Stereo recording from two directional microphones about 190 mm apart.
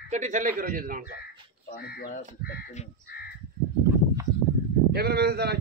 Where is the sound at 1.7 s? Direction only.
50° left (ahead or behind).